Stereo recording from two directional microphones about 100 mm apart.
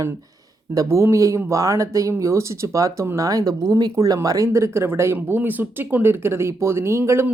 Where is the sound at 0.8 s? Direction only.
30° right (ahead or behind).